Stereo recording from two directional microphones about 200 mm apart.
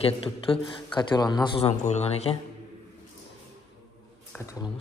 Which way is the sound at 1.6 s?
30° left (ahead or behind).